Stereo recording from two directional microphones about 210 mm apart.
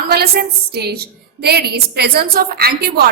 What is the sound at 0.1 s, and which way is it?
A woman's voice, 50° right (ahead or behind).